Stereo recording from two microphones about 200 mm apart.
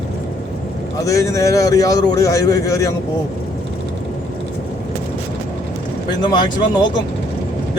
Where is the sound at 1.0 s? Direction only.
15° left (ahead or behind).